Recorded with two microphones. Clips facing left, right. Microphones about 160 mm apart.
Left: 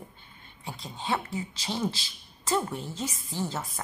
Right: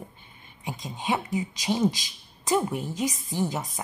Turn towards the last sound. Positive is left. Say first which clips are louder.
# right 4 dB
turn(degrees=-15)  # may be behind; listen again after turning